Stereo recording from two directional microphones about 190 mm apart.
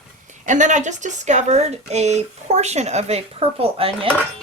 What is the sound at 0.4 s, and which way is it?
A woman's voice, 40° right (ahead or behind).